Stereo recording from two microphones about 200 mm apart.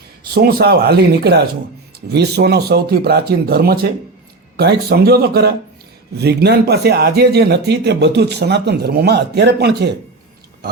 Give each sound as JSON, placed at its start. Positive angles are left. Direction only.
{"t": 0.3, "sound": "speech", "side_deg": -50}